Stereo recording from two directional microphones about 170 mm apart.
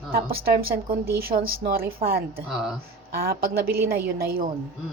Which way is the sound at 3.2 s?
65° right (ahead or behind).